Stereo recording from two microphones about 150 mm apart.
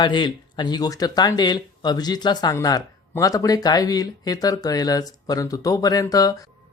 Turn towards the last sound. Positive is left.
turn(degrees=25)  # may be behind; listen again after turning